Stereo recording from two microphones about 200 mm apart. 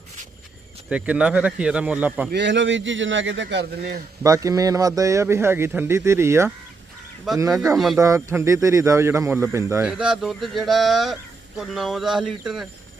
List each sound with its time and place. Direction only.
0.9 s speech: 5° right (ahead or behind)
2.3 s speech: 60° right (ahead or behind)
4.2 s a man's voice: 15° right (ahead or behind)
7.8 s speech: centre (ahead or behind)
8.0 s a man's voice: 15° right (ahead or behind)